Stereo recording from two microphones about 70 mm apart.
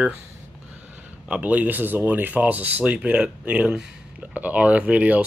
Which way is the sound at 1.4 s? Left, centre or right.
Right.